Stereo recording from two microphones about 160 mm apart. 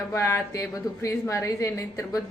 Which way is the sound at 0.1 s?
20° left (ahead or behind).